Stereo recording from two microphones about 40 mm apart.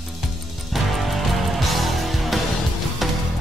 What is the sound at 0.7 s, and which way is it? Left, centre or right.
Music, centre.